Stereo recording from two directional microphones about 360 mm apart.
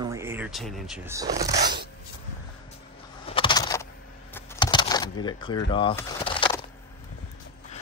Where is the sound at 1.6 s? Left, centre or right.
Right.